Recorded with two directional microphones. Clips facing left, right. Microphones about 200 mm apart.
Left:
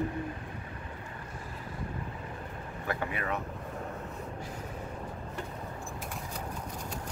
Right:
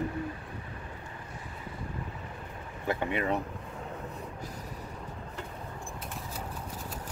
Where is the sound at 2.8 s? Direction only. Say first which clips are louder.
Right 4 dB; 20° right (ahead or behind).